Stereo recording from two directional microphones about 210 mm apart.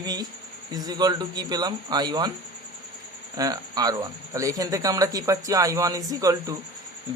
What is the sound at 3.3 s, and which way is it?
Speech, 15° right (ahead or behind).